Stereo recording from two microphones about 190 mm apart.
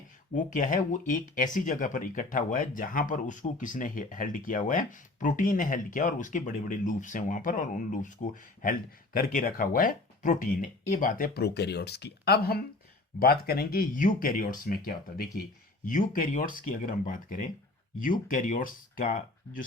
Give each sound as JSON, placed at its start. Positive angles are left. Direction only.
{"t": 0.3, "sound": "speech", "side_deg": 45}